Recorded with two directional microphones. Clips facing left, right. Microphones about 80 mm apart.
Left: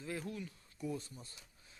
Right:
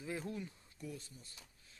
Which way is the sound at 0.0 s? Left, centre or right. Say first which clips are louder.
Even; centre.